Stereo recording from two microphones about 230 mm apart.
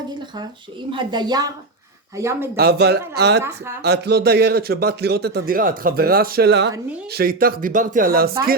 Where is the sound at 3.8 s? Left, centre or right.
Right.